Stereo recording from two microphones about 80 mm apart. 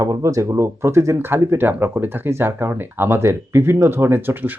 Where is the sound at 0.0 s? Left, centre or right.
Right.